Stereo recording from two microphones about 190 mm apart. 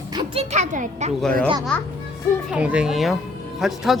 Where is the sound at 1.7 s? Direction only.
5° left (ahead or behind).